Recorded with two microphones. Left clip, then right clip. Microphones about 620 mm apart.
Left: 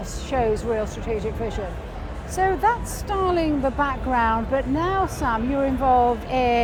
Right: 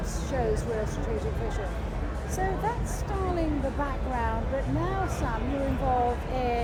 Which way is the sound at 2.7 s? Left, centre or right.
Left.